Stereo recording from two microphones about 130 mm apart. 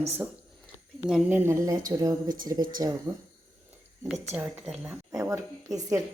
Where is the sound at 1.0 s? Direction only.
15° right (ahead or behind); by 2.9 s 30° right (ahead or behind).